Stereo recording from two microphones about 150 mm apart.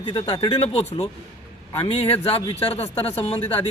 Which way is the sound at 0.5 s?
45° left (ahead or behind).